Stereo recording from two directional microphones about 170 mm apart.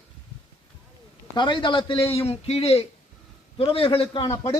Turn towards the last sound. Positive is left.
turn(degrees=25)  # may be behind; listen again after turning